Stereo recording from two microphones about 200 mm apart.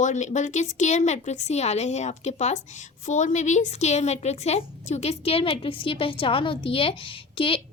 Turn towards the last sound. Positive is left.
turn(degrees=25)  # may be behind; listen again after turning